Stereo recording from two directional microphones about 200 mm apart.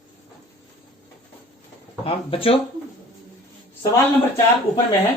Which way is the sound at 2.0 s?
25° left (ahead or behind).